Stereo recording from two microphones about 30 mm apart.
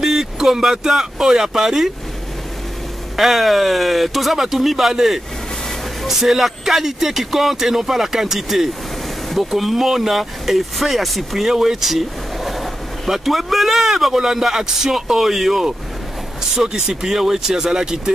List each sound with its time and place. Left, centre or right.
0.0 s speech: centre
3.2 s speech: centre
16.6 s speech: right